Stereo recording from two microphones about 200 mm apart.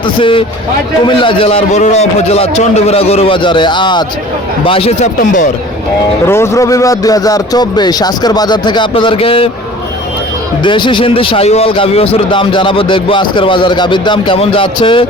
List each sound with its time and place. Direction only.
0.2 s speech: 25° left (ahead or behind)
6.2 s speech: 15° left (ahead or behind)
10.6 s speech: 25° left (ahead or behind)